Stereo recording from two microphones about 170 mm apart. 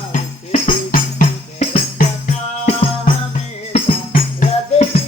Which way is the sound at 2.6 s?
40° left (ahead or behind).